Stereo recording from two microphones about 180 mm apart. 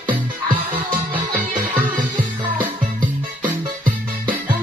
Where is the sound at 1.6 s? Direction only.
55° right (ahead or behind).